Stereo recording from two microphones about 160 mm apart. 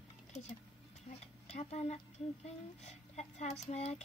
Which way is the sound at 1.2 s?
40° left (ahead or behind).